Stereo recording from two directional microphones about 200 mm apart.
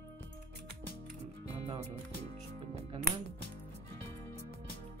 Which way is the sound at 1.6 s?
30° right (ahead or behind).